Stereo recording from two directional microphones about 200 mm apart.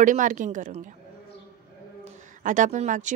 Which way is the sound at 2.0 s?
40° right (ahead or behind).